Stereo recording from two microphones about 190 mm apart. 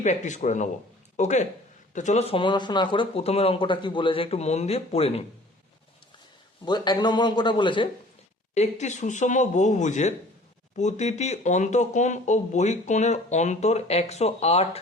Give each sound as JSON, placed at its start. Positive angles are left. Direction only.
{"t": 0.0, "sound": "speech", "side_deg": 40}
{"t": 6.7, "sound": "speech", "side_deg": 20}
{"t": 8.5, "sound": "speech", "side_deg": 35}